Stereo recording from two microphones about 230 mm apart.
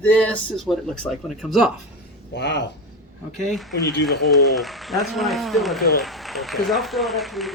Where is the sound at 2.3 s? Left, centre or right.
Left.